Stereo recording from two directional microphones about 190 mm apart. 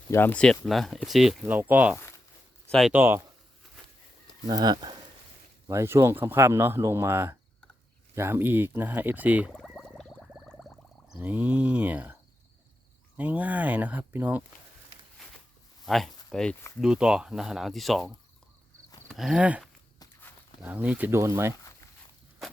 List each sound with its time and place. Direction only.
0.1 s speech: 10° left (ahead or behind)
2.9 s speech: 10° right (ahead or behind)
4.4 s speech: 20° right (ahead or behind)
9.6 s a sound: centre (ahead or behind)
11.2 s speech: 10° right (ahead or behind)
13.1 s speech: 10° right (ahead or behind)
15.2 s a sound: centre (ahead or behind)
15.9 s speech: centre (ahead or behind)
19.0 s a sound: centre (ahead or behind)
20.6 s speech: 10° right (ahead or behind)